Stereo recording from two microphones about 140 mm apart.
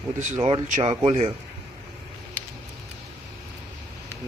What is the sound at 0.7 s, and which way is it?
Speech, 50° right (ahead or behind).